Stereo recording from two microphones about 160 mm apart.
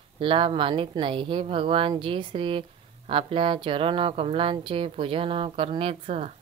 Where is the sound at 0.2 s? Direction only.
35° right (ahead or behind).